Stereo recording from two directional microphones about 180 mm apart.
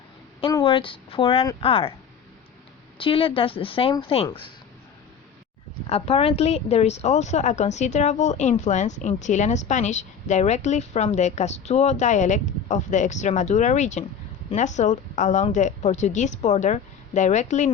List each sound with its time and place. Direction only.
0.4 s a woman's voice: 30° left (ahead or behind)
3.0 s a woman's voice: 30° left (ahead or behind)
5.9 s a woman's voice: 35° left (ahead or behind)